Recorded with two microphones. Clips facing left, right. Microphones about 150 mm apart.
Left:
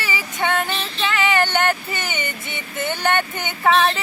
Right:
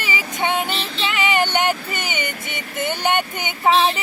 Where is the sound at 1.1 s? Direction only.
15° right (ahead or behind).